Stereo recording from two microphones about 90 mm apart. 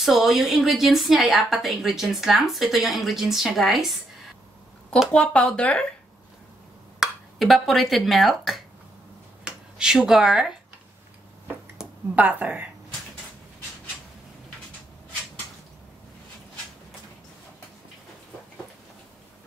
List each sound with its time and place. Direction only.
0.0 s speech: 5° right (ahead or behind)
5.1 s speech: 15° left (ahead or behind)
7.0 s speech: centre (ahead or behind)
11.8 s a sound: 5° right (ahead or behind)
12.2 s a woman's voice: 20° right (ahead or behind)